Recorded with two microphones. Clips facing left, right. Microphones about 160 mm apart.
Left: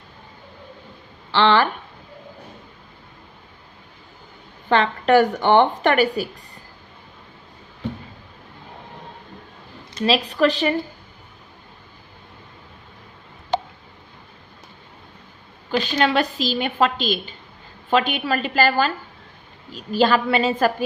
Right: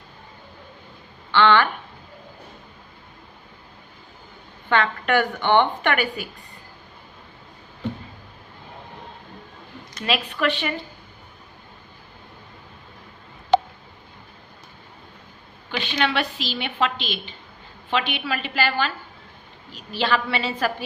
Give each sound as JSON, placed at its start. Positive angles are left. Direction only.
{"t": 1.3, "sound": "speech", "side_deg": 35}
{"t": 4.7, "sound": "a woman's voice", "side_deg": 35}
{"t": 9.9, "sound": "a woman's voice", "side_deg": 35}
{"t": 15.7, "sound": "a woman's voice", "side_deg": 40}